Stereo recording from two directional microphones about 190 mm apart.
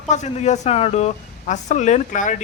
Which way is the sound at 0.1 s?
35° left (ahead or behind).